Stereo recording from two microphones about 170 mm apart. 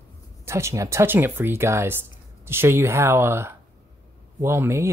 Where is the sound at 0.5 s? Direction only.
15° right (ahead or behind).